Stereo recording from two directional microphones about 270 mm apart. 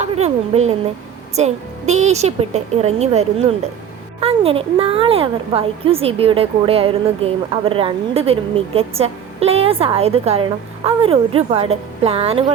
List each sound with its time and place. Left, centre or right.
0.0 s a woman's voice: right